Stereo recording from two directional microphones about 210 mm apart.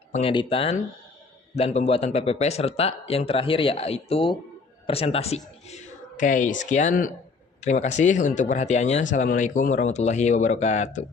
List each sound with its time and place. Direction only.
0.1 s speech: 25° left (ahead or behind)